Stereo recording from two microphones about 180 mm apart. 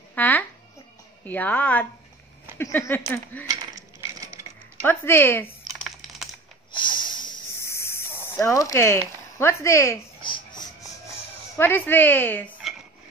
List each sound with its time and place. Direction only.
0.1 s babbling: 10° left (ahead or behind)
1.2 s speech: 10° left (ahead or behind)
4.8 s speech: 10° left (ahead or behind)
5.7 s typing: centre (ahead or behind)
6.7 s snake: 25° left (ahead or behind)
10.2 s a sound: 25° left (ahead or behind); by 12.5 s 10° left (ahead or behind)